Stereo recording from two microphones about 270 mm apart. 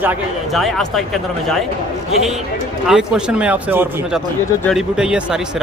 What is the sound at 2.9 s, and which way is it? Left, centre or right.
Speech, centre.